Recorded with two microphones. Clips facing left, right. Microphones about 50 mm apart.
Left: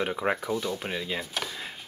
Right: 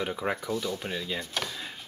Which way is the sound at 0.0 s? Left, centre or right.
Centre.